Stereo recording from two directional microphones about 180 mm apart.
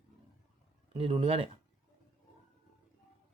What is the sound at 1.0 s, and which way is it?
Speech, 30° right (ahead or behind).